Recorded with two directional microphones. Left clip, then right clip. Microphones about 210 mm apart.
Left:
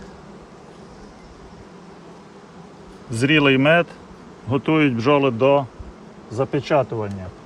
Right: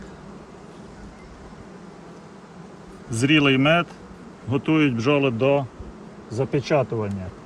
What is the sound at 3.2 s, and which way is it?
A man's voice, 40° left (ahead or behind).